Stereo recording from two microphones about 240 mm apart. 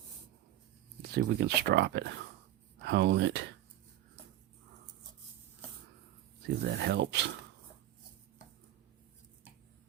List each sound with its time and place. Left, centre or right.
1.1 s speech: right
6.7 s speech: right